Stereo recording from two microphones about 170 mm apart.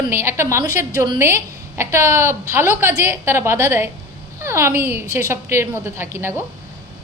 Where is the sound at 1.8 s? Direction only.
15° right (ahead or behind).